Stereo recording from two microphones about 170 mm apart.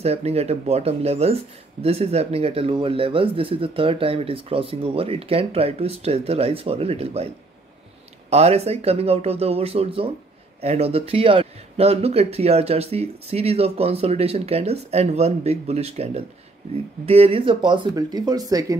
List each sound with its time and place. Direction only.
0.0 s speech: 40° right (ahead or behind)
8.3 s speech: 40° right (ahead or behind); by 18.8 s 20° right (ahead or behind)